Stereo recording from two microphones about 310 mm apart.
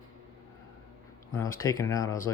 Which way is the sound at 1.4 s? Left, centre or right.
Centre.